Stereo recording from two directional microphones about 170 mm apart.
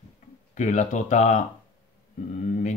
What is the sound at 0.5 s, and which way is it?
Speech, 45° left (ahead or behind).